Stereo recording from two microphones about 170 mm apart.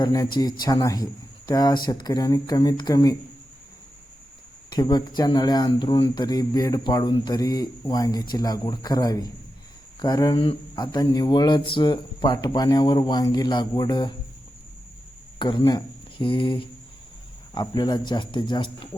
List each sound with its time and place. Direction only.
0.0 s speech: 20° left (ahead or behind)
4.7 s speech: 25° left (ahead or behind)
10.9 s speech: 20° left (ahead or behind)
15.4 s speech: 30° left (ahead or behind)